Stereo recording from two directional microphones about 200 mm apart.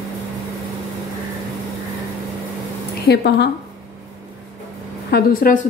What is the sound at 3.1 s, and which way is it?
Speech, 55° left (ahead or behind).